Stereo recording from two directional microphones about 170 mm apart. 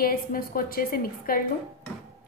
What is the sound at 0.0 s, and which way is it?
A woman's voice, 60° left (ahead or behind).